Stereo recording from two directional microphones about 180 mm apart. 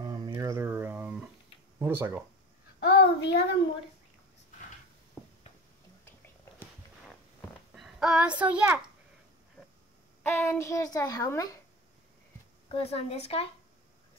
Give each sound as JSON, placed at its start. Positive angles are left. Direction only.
{"t": 0.0, "sound": "a sound", "side_deg": -20}
{"t": 1.8, "sound": "speech", "side_deg": -10}
{"t": 2.8, "sound": "child singing", "side_deg": 65}
{"t": 6.0, "sound": "a sound", "side_deg": 15}
{"t": 7.7, "sound": "a child's voice", "side_deg": 0}
{"t": 10.2, "sound": "a woman's voice", "side_deg": 10}
{"t": 12.6, "sound": "speech", "side_deg": 35}